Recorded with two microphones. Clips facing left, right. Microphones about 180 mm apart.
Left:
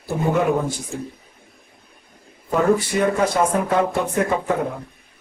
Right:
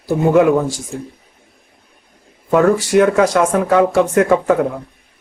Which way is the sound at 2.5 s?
85° right.